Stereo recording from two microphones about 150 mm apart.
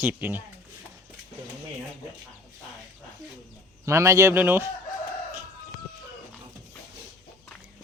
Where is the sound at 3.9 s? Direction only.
20° right (ahead or behind).